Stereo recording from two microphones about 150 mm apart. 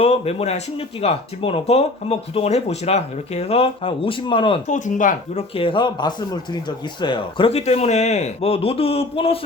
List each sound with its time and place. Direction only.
0.0 s speech: 40° left (ahead or behind)
4.7 s speech: 60° left (ahead or behind)
5.5 s speech: 35° left (ahead or behind)